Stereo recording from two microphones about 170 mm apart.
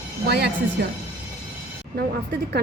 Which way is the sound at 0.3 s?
75° right (ahead or behind).